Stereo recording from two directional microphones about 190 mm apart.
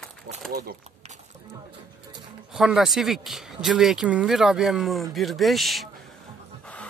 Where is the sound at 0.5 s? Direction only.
55° right (ahead or behind).